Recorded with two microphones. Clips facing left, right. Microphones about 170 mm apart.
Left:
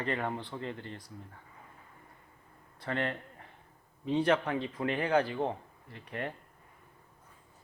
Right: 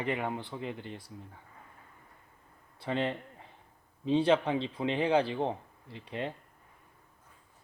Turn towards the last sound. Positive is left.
turn(degrees=-20)  # may be behind; listen again after turning